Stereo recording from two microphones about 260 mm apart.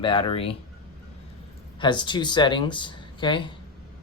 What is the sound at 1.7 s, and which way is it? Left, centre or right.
Speech, centre.